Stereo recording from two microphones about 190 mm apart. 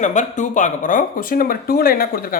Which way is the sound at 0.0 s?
40° left (ahead or behind).